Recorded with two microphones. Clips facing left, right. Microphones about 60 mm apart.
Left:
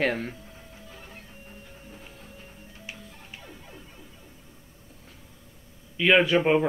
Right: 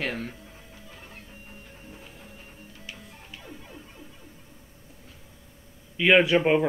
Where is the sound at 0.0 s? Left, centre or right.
Left.